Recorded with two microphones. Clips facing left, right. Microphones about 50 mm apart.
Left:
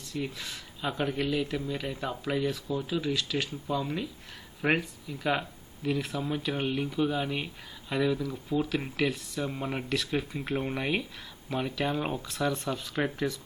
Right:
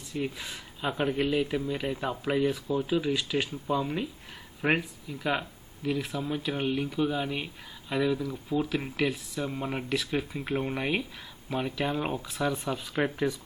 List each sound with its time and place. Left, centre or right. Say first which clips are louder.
0.1 s speech: right 2 dB; centre